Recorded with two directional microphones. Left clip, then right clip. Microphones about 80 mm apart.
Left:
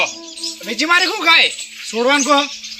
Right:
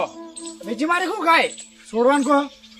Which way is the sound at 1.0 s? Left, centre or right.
Centre.